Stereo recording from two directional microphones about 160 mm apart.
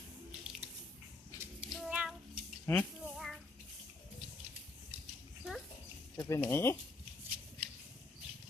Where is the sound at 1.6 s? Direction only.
5° right (ahead or behind).